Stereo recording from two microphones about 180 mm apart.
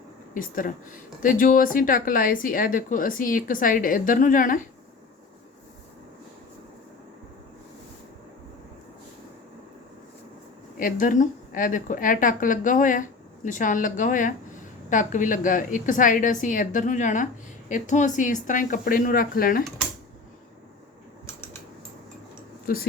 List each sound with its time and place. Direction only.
0.3 s a woman's voice: 50° left (ahead or behind)
10.8 s a woman's voice: 50° left (ahead or behind)
22.6 s speech: 55° left (ahead or behind)